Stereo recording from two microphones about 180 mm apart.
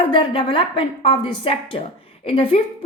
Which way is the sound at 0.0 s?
30° left (ahead or behind).